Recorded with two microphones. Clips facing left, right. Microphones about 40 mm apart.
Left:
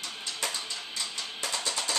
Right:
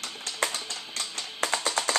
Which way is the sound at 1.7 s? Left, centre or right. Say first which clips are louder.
Right 5 dB; right.